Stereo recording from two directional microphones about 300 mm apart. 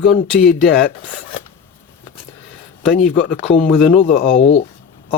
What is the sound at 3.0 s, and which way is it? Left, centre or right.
Speech, centre.